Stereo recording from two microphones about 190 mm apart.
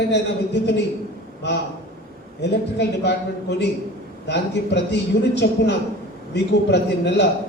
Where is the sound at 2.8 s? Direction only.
65° left (ahead or behind).